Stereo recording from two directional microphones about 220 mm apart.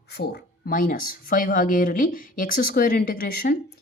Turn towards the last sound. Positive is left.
turn(degrees=40)  # may be behind; listen again after turning